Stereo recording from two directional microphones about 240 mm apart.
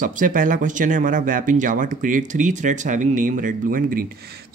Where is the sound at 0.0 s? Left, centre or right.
Right.